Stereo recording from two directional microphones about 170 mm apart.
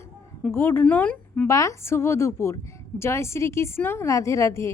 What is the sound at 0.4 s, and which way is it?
A woman's voice, 15° left (ahead or behind).